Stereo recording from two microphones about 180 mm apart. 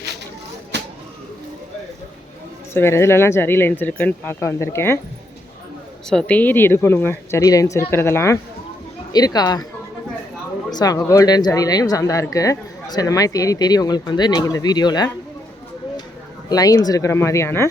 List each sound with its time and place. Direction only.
0.7 s a sound: 70° right (ahead or behind)
2.7 s a woman's voice: 15° left (ahead or behind)
6.1 s a woman's voice: 5° left (ahead or behind); by 9.6 s 20° left (ahead or behind)
10.7 s speech: 20° left (ahead or behind)
16.5 s a woman's voice: 20° left (ahead or behind)